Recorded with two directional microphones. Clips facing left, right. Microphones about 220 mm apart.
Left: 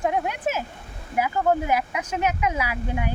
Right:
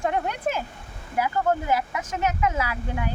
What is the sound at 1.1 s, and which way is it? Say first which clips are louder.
Speech: left 2 dB; 15° left (ahead or behind).